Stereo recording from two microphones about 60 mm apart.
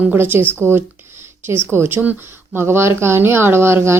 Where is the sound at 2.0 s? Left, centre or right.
Right.